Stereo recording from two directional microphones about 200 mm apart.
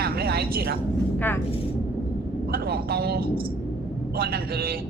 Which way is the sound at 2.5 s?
50° right (ahead or behind).